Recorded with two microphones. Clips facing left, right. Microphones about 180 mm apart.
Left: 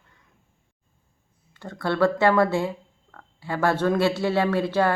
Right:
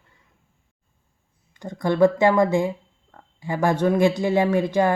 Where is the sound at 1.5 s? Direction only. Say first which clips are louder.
Right 3 dB; 15° right (ahead or behind).